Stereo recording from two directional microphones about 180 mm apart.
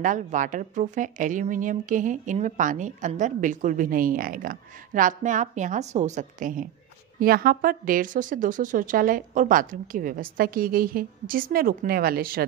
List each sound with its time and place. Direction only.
0.0 s speech: 45° right (ahead or behind)